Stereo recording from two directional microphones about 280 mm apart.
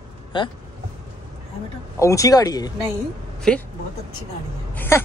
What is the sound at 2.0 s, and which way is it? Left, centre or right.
Speech, centre.